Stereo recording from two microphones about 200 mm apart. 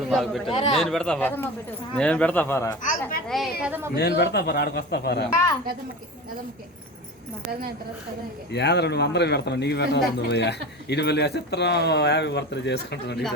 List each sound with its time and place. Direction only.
0.1 s speech: centre (ahead or behind)
2.8 s a man's voice: 45° left (ahead or behind)
3.2 s speech: centre (ahead or behind)
3.9 s a man's voice: 55° left (ahead or behind)
8.5 s a man's voice: 60° left (ahead or behind)